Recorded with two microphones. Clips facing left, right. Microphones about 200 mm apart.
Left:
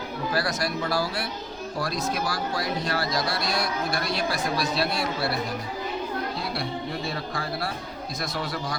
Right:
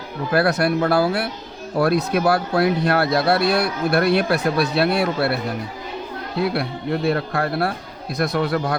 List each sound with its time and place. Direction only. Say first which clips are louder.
0.3 s speech: right 10 dB; 60° right (ahead or behind)
6.4 s speech: right 8 dB; 60° right (ahead or behind)